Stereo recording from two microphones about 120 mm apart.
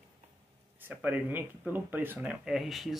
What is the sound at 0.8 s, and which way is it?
Speech, 15° right (ahead or behind).